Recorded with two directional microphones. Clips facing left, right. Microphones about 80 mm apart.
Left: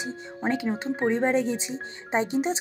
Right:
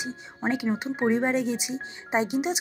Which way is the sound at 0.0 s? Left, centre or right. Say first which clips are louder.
Left 1 dB; centre.